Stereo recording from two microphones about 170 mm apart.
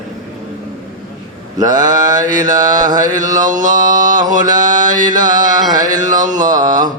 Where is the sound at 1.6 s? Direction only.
25° right (ahead or behind).